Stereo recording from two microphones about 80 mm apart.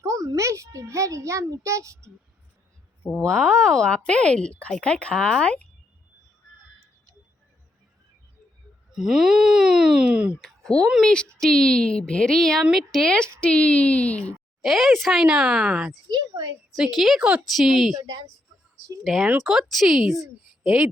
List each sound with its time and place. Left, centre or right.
0.0 s a child's voice: right
3.1 s speech: centre
9.0 s speech: centre
10.4 s a sound: centre
11.0 s speech: centre
14.6 s a woman's voice: centre
16.0 s a woman's voice: right
16.7 s a woman's voice: centre
17.2 s speech: centre
17.5 s a woman's voice: centre
17.9 s a woman's voice: right
19.0 s a woman's voice: centre